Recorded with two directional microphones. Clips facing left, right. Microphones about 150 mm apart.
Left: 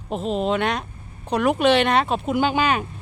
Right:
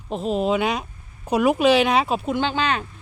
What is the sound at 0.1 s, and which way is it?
Speech, centre (ahead or behind).